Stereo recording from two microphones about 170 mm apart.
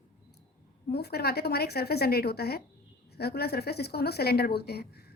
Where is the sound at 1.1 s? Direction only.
70° left (ahead or behind).